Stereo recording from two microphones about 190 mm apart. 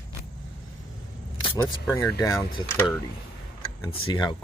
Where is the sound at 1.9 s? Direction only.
15° left (ahead or behind).